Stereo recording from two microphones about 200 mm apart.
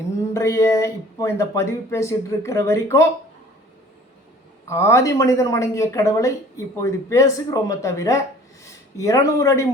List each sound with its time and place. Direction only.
0.3 s speech: 15° left (ahead or behind)
4.6 s speech: 15° left (ahead or behind)